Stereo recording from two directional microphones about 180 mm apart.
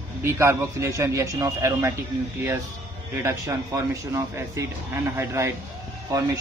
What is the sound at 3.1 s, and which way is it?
A man's voice, 15° right (ahead or behind).